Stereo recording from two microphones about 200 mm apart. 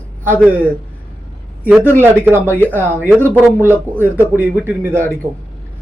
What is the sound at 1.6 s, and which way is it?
Speech, 10° right (ahead or behind).